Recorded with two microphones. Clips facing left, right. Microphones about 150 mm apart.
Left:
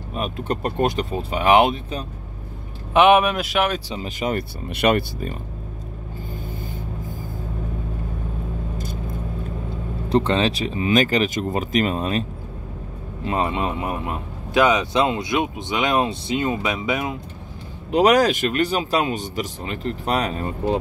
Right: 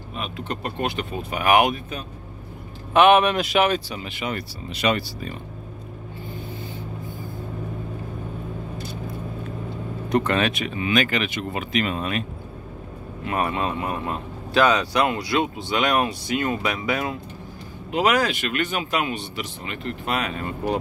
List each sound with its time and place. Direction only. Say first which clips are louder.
0.1 s speech: left 5 dB; 45° left (ahead or behind)
2.9 s a man's voice: left 1 dB; 15° left (ahead or behind)
3.9 s speech: left 5 dB; 40° left (ahead or behind)
4.6 s speech: left 4 dB; 55° left (ahead or behind)
10.0 s speech: left 2 dB; 30° left (ahead or behind)
17.9 s speech: left 5 dB; 40° left (ahead or behind)